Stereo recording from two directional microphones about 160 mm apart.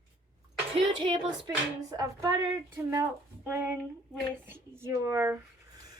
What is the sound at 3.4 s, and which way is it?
Speech, 15° right (ahead or behind).